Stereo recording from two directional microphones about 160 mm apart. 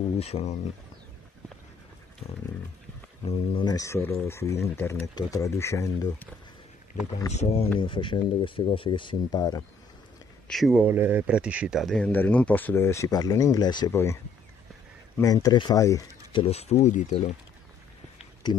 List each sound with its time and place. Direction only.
0.2 s speech: 40° left (ahead or behind)
3.3 s speech: 35° left (ahead or behind); by 6.2 s 20° left (ahead or behind)
7.3 s speech: 40° left (ahead or behind)
10.5 s speech: centre (ahead or behind)
10.8 s speech: 15° right (ahead or behind); by 16.1 s 20° left (ahead or behind)
16.3 s speech: 35° left (ahead or behind)